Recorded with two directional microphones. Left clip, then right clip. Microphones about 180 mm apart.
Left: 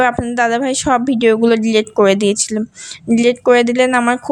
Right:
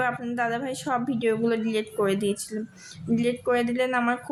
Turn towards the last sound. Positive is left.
turn(degrees=50)  # may be behind; listen again after turning